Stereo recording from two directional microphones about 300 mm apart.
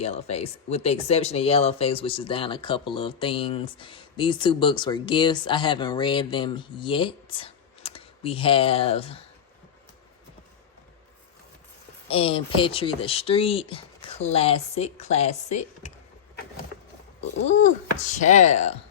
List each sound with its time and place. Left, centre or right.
0.0 s speech: left
12.0 s speech: centre
17.2 s speech: left